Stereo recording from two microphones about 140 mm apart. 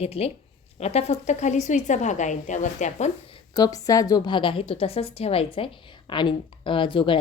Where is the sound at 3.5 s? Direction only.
25° left (ahead or behind).